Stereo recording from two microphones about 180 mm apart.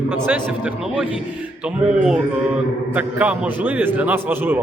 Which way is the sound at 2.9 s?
10° right (ahead or behind).